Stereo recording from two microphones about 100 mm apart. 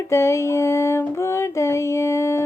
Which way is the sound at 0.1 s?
30° left (ahead or behind).